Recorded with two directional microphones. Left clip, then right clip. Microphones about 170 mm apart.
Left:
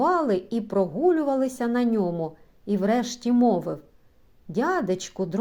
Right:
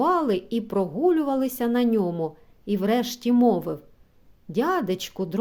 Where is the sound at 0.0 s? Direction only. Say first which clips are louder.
Even; 15° right (ahead or behind).